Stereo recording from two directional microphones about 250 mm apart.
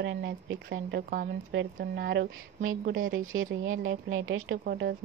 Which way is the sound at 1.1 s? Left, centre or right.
Right.